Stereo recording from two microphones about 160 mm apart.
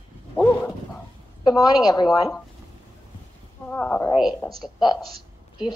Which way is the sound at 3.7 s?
10° left (ahead or behind).